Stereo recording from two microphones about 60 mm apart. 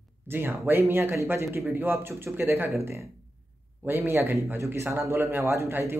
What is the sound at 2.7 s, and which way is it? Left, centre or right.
Speech, right.